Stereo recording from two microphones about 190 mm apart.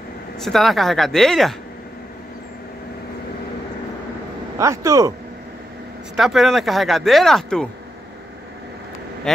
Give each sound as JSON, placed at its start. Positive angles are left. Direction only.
{"t": 0.4, "sound": "speech", "side_deg": 0}
{"t": 4.6, "sound": "speech", "side_deg": -15}
{"t": 6.1, "sound": "speech", "side_deg": 0}